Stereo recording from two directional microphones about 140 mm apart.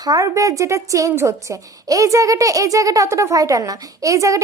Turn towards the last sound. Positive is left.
turn(degrees=-25)  # may be behind; listen again after turning